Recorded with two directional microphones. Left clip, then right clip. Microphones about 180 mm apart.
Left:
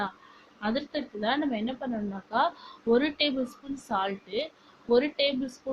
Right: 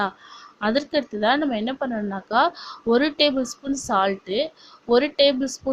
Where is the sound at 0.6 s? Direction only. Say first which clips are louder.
Right 9 dB; 50° right (ahead or behind).